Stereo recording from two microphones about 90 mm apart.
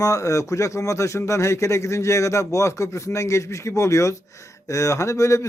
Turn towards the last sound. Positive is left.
turn(degrees=35)  # may be behind; listen again after turning